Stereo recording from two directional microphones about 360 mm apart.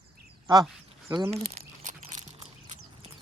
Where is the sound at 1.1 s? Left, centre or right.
Centre.